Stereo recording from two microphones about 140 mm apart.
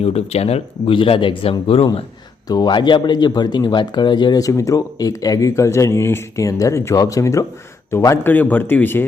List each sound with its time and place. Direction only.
0.0 s speech: 45° left (ahead or behind)
2.5 s speech: 30° left (ahead or behind); by 9.0 s 15° left (ahead or behind)